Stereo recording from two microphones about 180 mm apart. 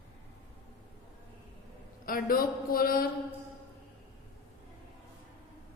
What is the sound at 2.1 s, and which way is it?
A man's voice, 55° left (ahead or behind).